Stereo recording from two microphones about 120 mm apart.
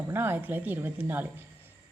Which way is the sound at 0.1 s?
20° right (ahead or behind).